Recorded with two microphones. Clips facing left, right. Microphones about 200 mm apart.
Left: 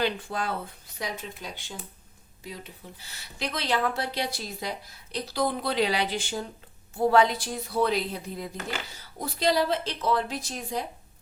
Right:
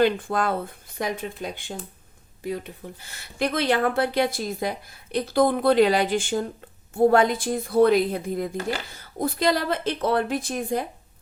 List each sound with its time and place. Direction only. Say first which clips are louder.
0.0 s speech: right 7 dB; 50° right (ahead or behind)